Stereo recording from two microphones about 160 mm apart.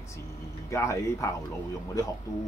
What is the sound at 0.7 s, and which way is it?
Speech, 20° left (ahead or behind).